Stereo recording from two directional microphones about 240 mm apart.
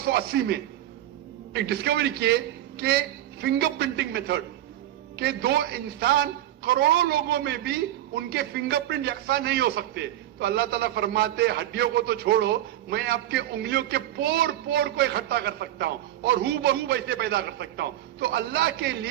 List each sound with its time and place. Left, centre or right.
0.0 s a man's voice: right